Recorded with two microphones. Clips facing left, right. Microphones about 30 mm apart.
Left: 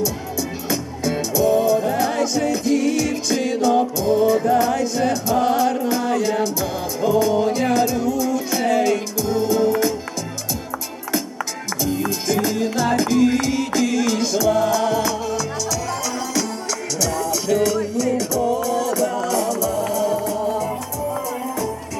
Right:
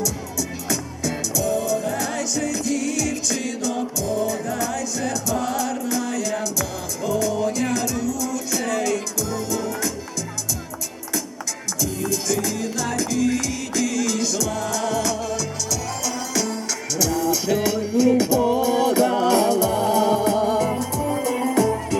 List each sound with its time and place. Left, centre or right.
0.0 s music: left
11.8 s music: left; by 21.7 s right